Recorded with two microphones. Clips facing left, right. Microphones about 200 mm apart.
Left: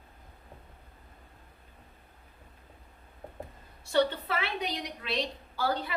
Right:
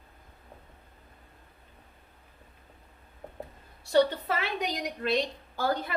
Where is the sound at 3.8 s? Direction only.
40° right (ahead or behind).